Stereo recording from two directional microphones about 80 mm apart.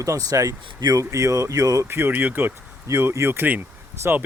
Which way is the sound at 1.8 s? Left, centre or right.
Right.